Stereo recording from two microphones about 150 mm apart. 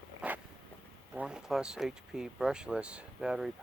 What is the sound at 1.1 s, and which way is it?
Speech, 5° right (ahead or behind).